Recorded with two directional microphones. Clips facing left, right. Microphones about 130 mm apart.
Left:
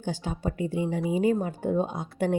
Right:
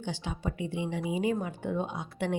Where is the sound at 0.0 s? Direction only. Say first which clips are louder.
Left 4 dB; 45° left (ahead or behind).